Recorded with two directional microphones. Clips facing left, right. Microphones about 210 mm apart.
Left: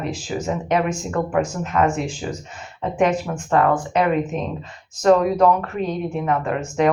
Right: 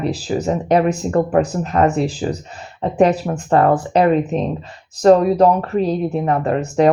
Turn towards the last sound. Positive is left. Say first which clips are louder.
# right 5 dB
turn(degrees=-35)  # may be behind; listen again after turning